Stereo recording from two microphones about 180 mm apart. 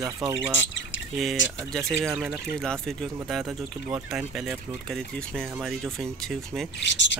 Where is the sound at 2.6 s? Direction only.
5° left (ahead or behind).